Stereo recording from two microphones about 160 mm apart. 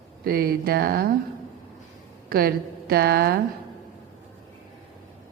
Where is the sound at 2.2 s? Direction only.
70° right (ahead or behind).